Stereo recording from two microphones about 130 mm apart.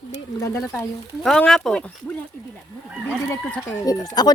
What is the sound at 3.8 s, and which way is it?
Speech, 30° left (ahead or behind).